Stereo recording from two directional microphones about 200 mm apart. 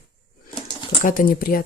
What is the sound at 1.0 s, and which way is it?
Speech, 45° left (ahead or behind).